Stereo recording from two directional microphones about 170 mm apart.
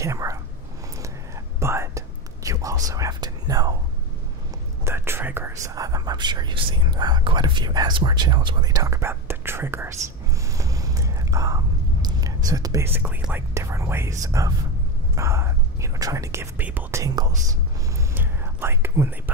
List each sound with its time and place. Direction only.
0.0 s whispering: 20° right (ahead or behind)
4.8 s speech: 15° right (ahead or behind)
17.9 s whispering: 10° right (ahead or behind)